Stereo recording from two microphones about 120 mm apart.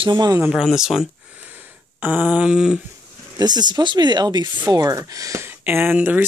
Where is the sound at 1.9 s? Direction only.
15° right (ahead or behind).